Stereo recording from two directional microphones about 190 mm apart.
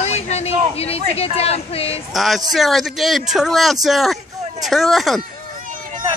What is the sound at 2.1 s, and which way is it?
Speech, centre (ahead or behind).